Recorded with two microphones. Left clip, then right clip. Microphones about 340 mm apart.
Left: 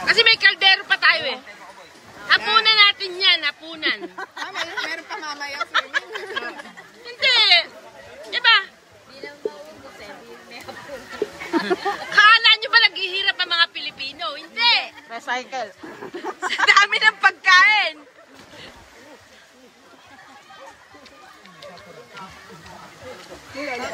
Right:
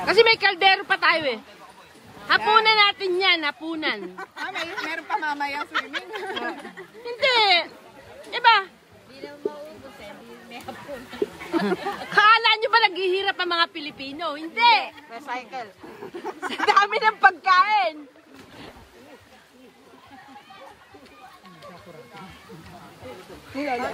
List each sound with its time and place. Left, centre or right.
0.0 s a woman's voice: centre
4.2 s speech: left
5.2 s a woman's voice: right
5.7 s speech: left
7.1 s a woman's voice: centre
11.6 s a woman's voice: centre
15.0 s speech: left
16.4 s a woman's voice: centre